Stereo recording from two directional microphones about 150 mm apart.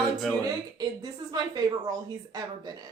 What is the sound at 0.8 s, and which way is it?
Speech, 30° right (ahead or behind).